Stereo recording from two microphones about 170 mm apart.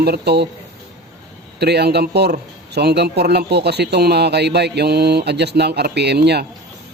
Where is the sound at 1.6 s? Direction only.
75° right (ahead or behind).